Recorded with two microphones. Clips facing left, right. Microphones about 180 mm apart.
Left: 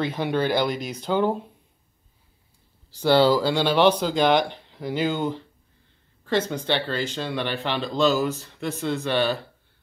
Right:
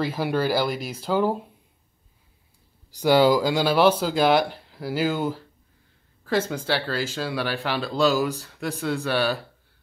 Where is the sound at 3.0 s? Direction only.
10° right (ahead or behind).